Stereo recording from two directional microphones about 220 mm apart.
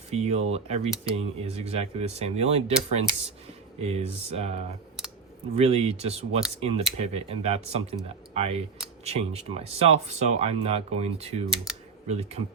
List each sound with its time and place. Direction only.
0.1 s speech: 30° right (ahead or behind)
5.5 s speech: 30° right (ahead or behind)
11.5 s speech: 5° right (ahead or behind)
12.0 s speech: 30° right (ahead or behind)